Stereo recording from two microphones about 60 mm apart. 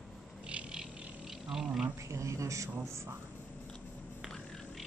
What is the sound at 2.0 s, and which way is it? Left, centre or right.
Speech, right.